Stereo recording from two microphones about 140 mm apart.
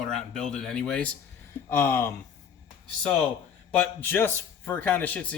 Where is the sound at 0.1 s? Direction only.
Centre (ahead or behind).